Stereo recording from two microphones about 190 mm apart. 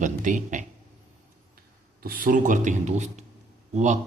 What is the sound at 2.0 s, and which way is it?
A man's voice, 50° right (ahead or behind).